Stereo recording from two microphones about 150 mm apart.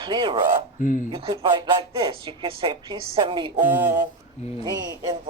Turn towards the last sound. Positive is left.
turn(degrees=-25)  # may be behind; listen again after turning